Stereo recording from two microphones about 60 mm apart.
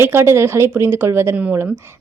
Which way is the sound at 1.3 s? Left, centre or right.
Right.